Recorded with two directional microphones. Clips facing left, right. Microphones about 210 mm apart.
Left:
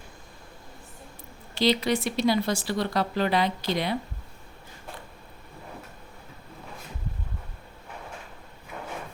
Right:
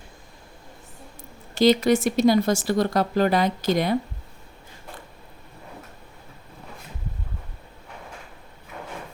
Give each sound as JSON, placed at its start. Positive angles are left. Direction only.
{"t": 1.5, "sound": "speech", "side_deg": -45}